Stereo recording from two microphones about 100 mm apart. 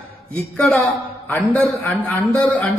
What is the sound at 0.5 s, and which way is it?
Speech, centre (ahead or behind).